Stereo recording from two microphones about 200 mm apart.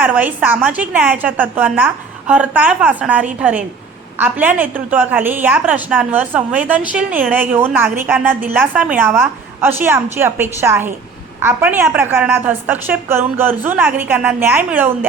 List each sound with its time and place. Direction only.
0.0 s a woman's voice: 10° right (ahead or behind)